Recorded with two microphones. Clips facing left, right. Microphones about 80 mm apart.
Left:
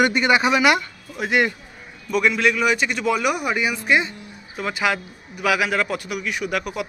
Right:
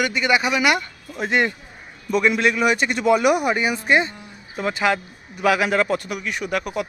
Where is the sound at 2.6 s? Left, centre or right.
Centre.